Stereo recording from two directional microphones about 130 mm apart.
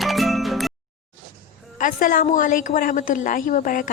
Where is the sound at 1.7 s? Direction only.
90° left.